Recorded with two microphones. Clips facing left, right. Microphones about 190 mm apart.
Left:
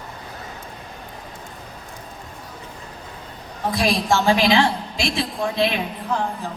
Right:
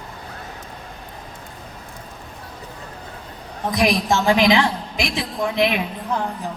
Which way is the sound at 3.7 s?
20° right (ahead or behind).